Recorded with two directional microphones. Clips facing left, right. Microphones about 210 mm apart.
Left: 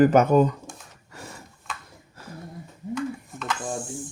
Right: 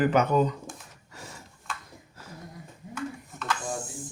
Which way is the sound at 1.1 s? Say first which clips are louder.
Left 3 dB; 55° left (ahead or behind).